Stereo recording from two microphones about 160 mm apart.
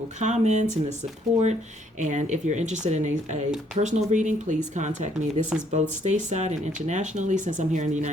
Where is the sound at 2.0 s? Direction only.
50° right (ahead or behind).